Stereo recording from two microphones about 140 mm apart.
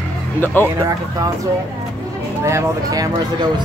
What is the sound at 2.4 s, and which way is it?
Speech, 25° right (ahead or behind).